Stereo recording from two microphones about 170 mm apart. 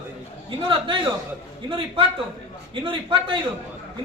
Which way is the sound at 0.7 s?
30° right (ahead or behind).